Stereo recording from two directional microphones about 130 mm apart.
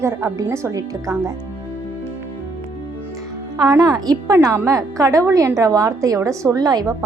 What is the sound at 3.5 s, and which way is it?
A woman's voice, 30° right (ahead or behind).